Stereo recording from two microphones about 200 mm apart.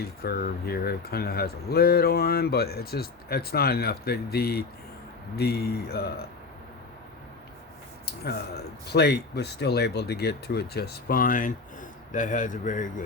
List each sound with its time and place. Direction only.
0.0 s speech: 50° left (ahead or behind)
8.0 s speech: 50° left (ahead or behind)